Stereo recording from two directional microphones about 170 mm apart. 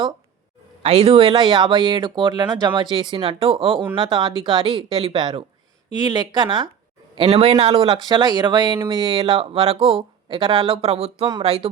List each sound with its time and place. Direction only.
0.8 s speech: 35° right (ahead or behind)